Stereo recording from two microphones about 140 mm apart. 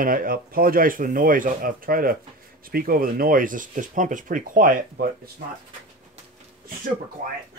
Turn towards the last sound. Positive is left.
turn(degrees=-70)  # may be behind; listen again after turning